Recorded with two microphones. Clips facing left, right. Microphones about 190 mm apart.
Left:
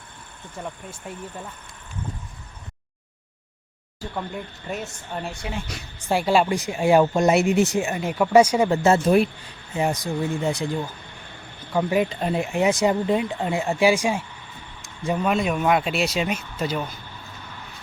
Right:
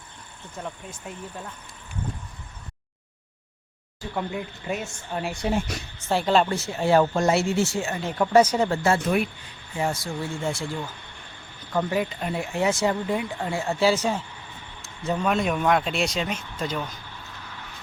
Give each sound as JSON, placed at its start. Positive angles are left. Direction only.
{"t": 0.6, "sound": "speech", "side_deg": 5}
{"t": 4.1, "sound": "speech", "side_deg": -5}
{"t": 5.7, "sound": "a woman's voice", "side_deg": -50}
{"t": 6.1, "sound": "speech", "side_deg": 10}
{"t": 9.7, "sound": "speech", "side_deg": 20}